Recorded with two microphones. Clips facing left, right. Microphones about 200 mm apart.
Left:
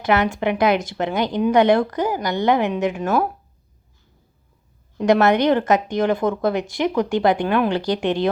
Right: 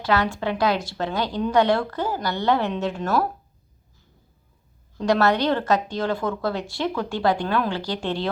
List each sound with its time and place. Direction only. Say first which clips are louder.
0.0 s a woman's voice: left 4 dB; 20° left (ahead or behind)
4.9 s a woman's voice: left 4 dB; 15° left (ahead or behind)